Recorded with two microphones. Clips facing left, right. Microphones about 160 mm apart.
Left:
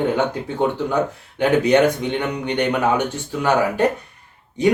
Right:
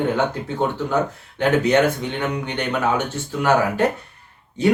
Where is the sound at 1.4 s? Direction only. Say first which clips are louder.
Left 2 dB; 15° left (ahead or behind).